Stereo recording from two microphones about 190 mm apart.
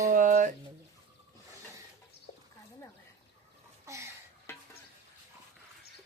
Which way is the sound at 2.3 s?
50° left (ahead or behind).